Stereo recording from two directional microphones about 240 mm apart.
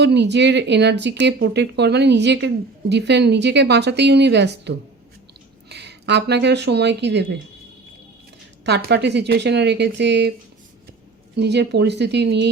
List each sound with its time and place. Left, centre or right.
0.0 s speech: right
8.6 s speech: right
11.3 s speech: right